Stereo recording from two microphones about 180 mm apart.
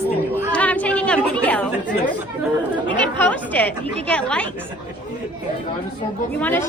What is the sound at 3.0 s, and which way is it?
A woman's voice, 10° left (ahead or behind).